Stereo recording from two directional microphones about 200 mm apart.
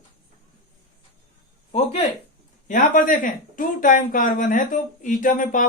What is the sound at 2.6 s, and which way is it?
Speech, 40° left (ahead or behind).